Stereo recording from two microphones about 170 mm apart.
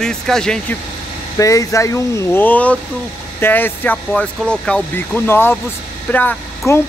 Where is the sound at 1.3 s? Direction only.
20° left (ahead or behind).